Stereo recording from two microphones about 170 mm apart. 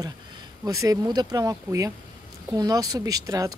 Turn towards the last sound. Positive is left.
turn(degrees=-20)  # may be behind; listen again after turning